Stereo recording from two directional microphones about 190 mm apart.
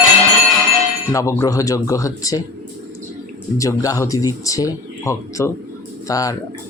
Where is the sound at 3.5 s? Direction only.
15° left (ahead or behind).